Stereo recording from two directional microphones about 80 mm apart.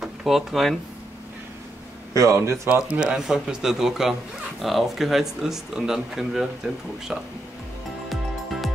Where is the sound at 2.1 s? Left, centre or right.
Right.